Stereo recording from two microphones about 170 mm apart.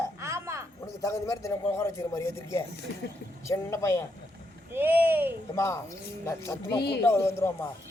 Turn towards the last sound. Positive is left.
turn(degrees=15)  # may be behind; listen again after turning